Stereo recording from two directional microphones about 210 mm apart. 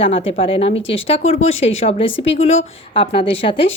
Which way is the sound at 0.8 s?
65° left (ahead or behind).